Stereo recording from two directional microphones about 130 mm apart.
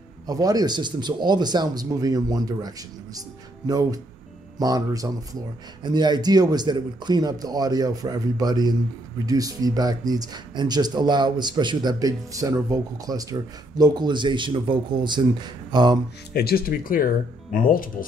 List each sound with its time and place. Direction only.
0.3 s speech: 30° right (ahead or behind)
16.8 s speech: 90° left